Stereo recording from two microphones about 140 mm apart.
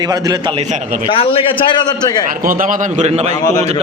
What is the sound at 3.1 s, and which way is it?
Speech, 50° right (ahead or behind).